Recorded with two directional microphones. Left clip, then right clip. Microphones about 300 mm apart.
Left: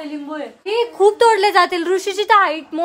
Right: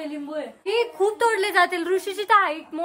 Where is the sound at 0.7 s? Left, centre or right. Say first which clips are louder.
Left 7 dB; centre.